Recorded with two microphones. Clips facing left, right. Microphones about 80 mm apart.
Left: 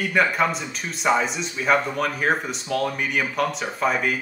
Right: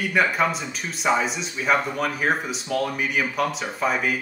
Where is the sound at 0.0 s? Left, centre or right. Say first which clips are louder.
Even; centre.